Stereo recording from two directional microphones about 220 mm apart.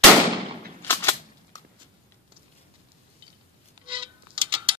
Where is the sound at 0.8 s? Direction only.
10° left (ahead or behind).